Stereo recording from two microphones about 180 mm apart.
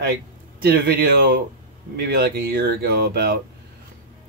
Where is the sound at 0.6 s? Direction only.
60° right (ahead or behind).